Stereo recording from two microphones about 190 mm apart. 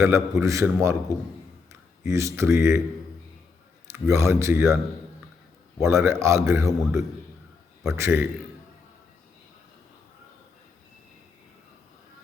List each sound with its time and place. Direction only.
0.0 s a man's voice: 15° right (ahead or behind)
4.0 s a man's voice: 15° right (ahead or behind)
5.8 s a man's voice: 15° right (ahead or behind)